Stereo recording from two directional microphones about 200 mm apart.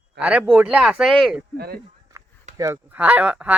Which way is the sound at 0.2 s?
5° right (ahead or behind).